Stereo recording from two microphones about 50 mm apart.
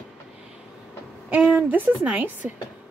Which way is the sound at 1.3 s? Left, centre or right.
Right.